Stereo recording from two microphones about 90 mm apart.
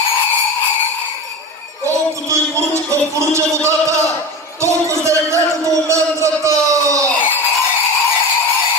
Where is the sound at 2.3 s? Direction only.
35° right (ahead or behind).